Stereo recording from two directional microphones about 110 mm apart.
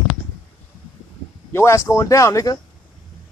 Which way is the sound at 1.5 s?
25° left (ahead or behind).